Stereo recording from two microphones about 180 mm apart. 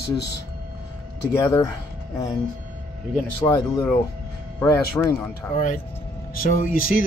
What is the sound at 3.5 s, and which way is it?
Speech, 10° left (ahead or behind).